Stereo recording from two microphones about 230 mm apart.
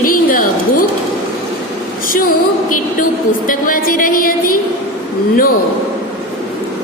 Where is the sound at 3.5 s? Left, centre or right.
Left.